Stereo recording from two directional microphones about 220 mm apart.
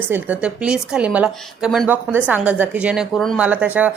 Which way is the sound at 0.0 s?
5° right (ahead or behind).